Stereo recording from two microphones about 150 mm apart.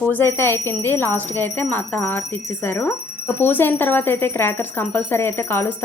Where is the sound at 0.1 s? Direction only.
15° left (ahead or behind).